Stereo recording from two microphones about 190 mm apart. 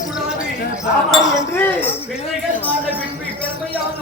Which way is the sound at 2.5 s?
45° right (ahead or behind).